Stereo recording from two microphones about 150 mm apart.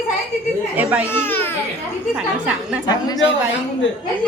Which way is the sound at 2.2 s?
10° right (ahead or behind).